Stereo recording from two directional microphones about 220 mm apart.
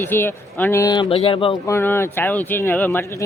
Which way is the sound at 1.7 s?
10° left (ahead or behind).